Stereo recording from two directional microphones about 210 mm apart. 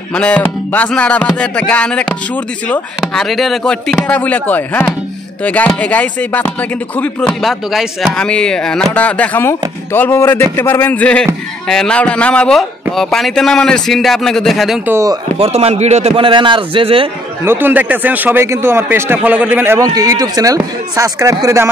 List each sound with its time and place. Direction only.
0.1 s speech: 5° left (ahead or behind)
14.9 s a man's voice: 15° right (ahead or behind)
15.3 s a man's voice: 30° right (ahead or behind)
17.5 s a man's voice: 10° right (ahead or behind)